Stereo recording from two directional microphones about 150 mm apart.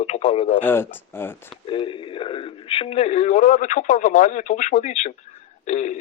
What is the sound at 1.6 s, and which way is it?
Speech, 35° left (ahead or behind).